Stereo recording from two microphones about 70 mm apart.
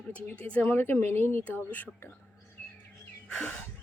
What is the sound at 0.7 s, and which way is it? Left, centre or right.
A woman's voice, left.